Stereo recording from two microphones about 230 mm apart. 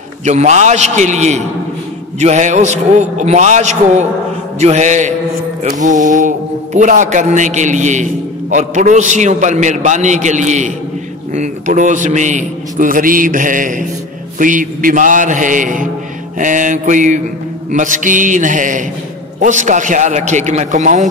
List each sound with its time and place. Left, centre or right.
0.2 s speech: right